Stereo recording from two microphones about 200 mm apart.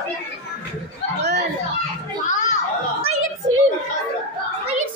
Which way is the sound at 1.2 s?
60° right (ahead or behind).